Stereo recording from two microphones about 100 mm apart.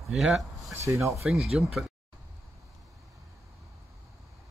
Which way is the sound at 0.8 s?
30° right (ahead or behind).